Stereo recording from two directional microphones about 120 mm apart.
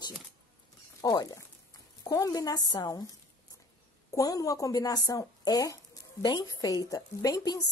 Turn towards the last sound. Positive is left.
turn(degrees=30)  # may be behind; listen again after turning